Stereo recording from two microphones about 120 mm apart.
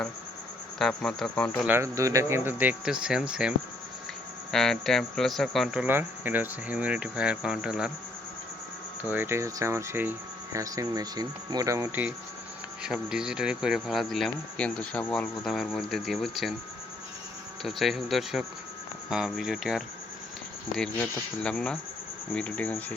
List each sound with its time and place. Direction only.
0.8 s speech: 5° left (ahead or behind)
1.6 s speech: 20° right (ahead or behind)
4.5 s speech: 5° left (ahead or behind)
5.8 s speech: 15° right (ahead or behind)
9.0 s speech: 15° right (ahead or behind)
17.6 s speech: centre (ahead or behind)